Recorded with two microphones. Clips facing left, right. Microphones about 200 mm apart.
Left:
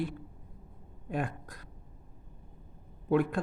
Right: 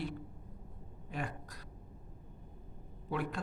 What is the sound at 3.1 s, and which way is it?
Speech, 50° left (ahead or behind).